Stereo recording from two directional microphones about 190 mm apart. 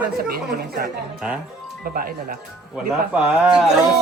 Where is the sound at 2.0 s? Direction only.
50° right (ahead or behind).